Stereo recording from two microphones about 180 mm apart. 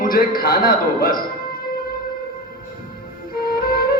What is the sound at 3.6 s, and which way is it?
Music, 55° left (ahead or behind).